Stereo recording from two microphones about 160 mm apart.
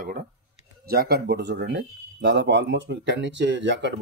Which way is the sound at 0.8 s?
75° right (ahead or behind).